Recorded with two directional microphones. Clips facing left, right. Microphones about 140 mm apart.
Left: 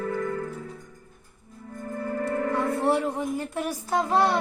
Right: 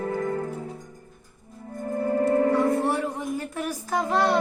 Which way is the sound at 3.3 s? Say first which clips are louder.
Left 1 dB; 25° left (ahead or behind).